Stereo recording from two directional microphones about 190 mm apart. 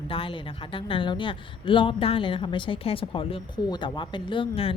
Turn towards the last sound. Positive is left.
turn(degrees=30)  # may be behind; listen again after turning